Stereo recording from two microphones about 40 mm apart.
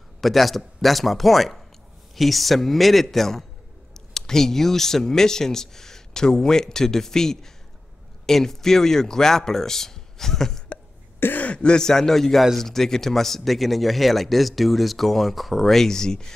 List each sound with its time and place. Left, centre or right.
0.2 s speech: centre
11.3 s speech: left
11.8 s speech: centre